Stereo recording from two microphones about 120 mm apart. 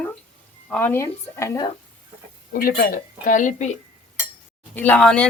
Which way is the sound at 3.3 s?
90° left.